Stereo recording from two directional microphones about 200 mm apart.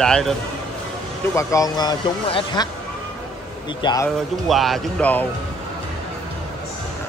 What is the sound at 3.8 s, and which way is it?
Speech, 20° left (ahead or behind).